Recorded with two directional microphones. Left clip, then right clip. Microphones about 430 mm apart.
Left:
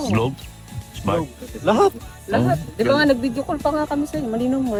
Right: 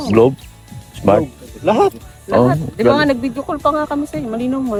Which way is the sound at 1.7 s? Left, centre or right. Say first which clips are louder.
Right 3 dB; centre.